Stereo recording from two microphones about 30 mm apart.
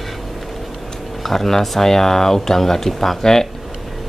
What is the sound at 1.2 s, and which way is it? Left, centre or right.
Speech, centre.